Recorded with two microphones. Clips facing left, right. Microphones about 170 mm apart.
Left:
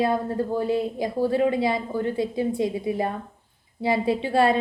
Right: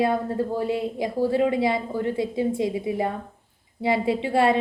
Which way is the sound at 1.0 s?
25° right (ahead or behind).